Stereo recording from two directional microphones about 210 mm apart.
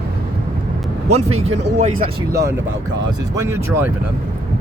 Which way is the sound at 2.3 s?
15° right (ahead or behind).